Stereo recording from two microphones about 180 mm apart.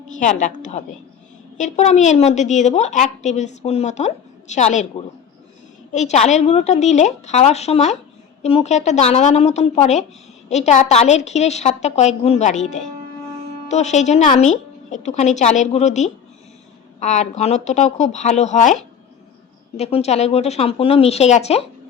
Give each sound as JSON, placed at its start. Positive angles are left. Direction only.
{"t": 0.2, "sound": "a woman's voice", "side_deg": 45}
{"t": 5.9, "sound": "a woman's voice", "side_deg": 40}